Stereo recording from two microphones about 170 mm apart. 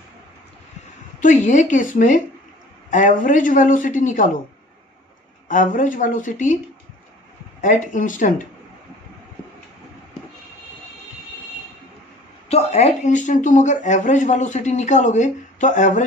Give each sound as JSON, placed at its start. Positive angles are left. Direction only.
{"t": 1.2, "sound": "speech", "side_deg": 45}
{"t": 5.5, "sound": "speech", "side_deg": 50}
{"t": 7.6, "sound": "speech", "side_deg": 50}
{"t": 12.4, "sound": "speech", "side_deg": 40}